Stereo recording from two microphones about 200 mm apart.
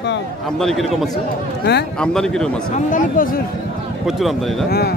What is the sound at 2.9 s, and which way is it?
Speech, 40° left (ahead or behind).